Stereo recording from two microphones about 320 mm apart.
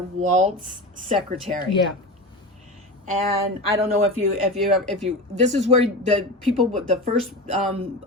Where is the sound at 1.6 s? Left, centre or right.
Centre.